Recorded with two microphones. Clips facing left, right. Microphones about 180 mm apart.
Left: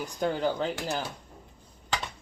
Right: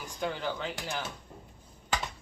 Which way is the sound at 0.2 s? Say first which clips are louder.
Left 6 dB; 40° left (ahead or behind).